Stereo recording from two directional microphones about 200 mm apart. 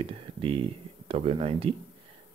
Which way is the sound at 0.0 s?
25° right (ahead or behind).